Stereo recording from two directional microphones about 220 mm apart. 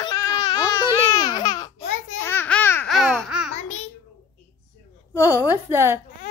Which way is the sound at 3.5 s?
30° left (ahead or behind).